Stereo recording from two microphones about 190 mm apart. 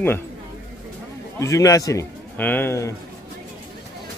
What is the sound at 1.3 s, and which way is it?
A man's voice, 15° left (ahead or behind).